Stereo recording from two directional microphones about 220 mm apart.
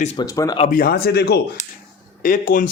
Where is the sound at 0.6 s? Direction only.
40° left (ahead or behind).